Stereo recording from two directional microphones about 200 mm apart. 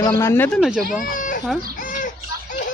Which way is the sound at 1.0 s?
40° left (ahead or behind).